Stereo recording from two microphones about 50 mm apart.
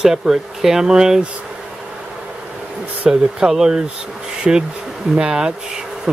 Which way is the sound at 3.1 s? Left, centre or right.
Centre.